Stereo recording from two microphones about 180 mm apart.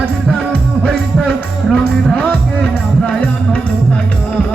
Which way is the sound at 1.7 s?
5° left (ahead or behind).